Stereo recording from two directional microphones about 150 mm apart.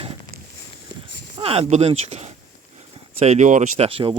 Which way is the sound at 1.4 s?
40° right (ahead or behind).